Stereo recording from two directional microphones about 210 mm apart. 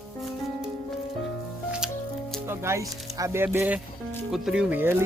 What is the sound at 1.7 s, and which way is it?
Music, 5° right (ahead or behind).